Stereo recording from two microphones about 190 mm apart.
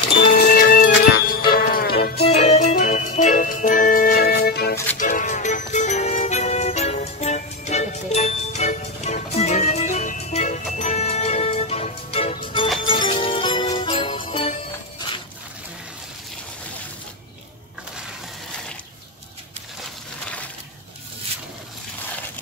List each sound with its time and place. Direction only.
0.6 s music: 50° left (ahead or behind)
2.2 s music: 35° left (ahead or behind); by 4.7 s 55° left (ahead or behind)
4.9 s music: 45° left (ahead or behind); by 14.5 s 25° left (ahead or behind)
15.0 s a sound: 25° left (ahead or behind)